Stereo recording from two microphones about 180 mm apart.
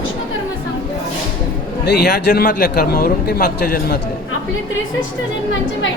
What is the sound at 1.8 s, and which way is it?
A man's voice, 60° left (ahead or behind).